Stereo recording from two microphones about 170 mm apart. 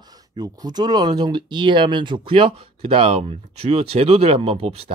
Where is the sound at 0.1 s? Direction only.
25° right (ahead or behind).